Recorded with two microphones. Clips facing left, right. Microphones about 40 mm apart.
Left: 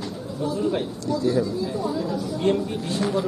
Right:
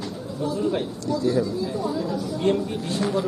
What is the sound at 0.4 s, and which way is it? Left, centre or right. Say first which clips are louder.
A man's voice: even; centre.